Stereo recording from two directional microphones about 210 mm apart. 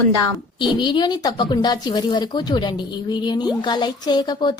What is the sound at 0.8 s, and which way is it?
Speech, 20° left (ahead or behind).